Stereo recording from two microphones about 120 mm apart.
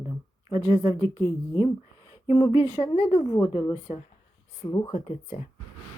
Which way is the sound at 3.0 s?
45° left (ahead or behind).